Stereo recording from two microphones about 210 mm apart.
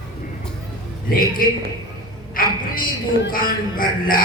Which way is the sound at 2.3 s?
40° left (ahead or behind).